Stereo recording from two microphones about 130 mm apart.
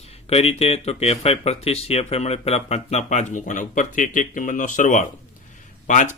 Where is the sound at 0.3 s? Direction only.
50° left (ahead or behind).